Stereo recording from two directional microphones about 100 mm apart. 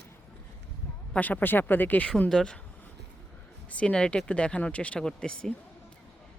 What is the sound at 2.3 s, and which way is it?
Speech, 5° left (ahead or behind).